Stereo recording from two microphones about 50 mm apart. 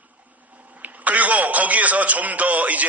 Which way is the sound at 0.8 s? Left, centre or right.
Right.